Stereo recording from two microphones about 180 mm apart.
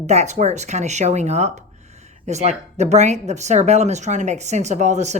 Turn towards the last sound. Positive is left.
turn(degrees=-40)  # may be behind; listen again after turning